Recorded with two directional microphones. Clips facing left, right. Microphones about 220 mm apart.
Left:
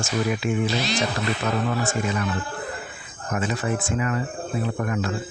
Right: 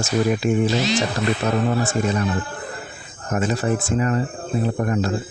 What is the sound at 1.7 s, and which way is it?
Speech, 35° right (ahead or behind).